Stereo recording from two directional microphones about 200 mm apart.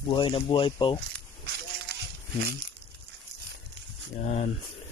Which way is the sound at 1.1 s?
55° right (ahead or behind).